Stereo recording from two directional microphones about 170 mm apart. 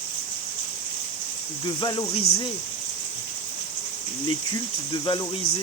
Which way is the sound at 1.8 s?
25° left (ahead or behind).